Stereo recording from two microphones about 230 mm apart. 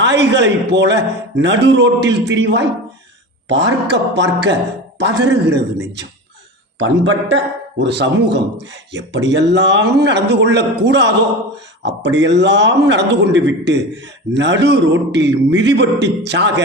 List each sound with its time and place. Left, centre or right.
0.0 s speech: right
6.7 s speech: right